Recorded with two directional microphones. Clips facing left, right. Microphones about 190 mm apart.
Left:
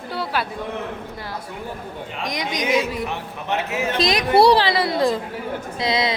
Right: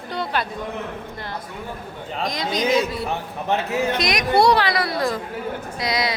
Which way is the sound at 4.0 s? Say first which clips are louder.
Left 5 dB; 30° left (ahead or behind).